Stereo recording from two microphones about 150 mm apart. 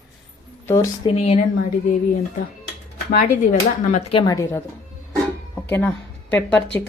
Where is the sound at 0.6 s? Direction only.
20° left (ahead or behind).